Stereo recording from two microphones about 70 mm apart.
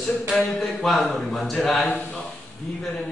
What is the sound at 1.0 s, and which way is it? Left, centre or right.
Speech, centre.